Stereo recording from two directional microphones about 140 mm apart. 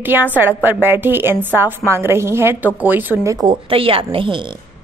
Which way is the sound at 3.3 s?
35° right (ahead or behind).